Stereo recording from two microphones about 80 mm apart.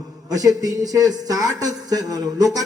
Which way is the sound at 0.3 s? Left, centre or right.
Right.